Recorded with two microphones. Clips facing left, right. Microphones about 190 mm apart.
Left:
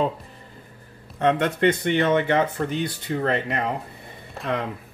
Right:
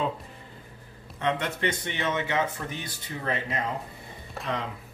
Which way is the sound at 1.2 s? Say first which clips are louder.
Left 8 dB; 55° left (ahead or behind).